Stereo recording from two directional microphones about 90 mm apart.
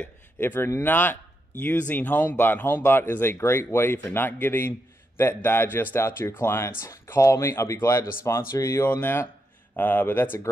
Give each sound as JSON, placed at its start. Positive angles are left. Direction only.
{"t": 0.0, "sound": "a man's voice", "side_deg": 20}
{"t": 8.8, "sound": "speech", "side_deg": 25}